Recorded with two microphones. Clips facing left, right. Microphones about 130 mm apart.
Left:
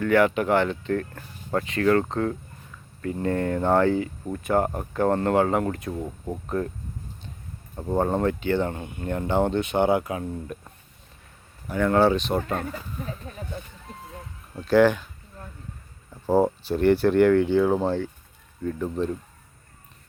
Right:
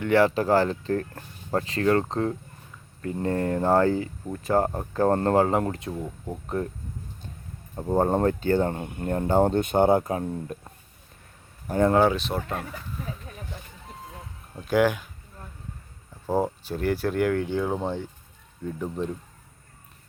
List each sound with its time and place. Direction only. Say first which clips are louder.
0.0 s speech: even; 30° right (ahead or behind)
7.9 s speech: right 1 dB; 35° right (ahead or behind)
11.7 s speech: right 2 dB; 35° right (ahead or behind)
11.9 s speech: left 2 dB; 5° right (ahead or behind)
14.5 s speech: left 4 dB; 10° right (ahead or behind)
16.2 s speech: left 5 dB; 10° left (ahead or behind)
16.7 s speech: left 7 dB; 5° right (ahead or behind)
17.7 s speech: left 5 dB; 5° left (ahead or behind)
18.6 s speech: left 3 dB; 15° right (ahead or behind)